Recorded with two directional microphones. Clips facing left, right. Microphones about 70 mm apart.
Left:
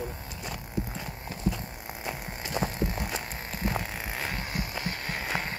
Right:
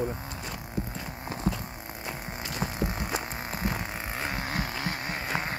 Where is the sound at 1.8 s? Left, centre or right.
Centre.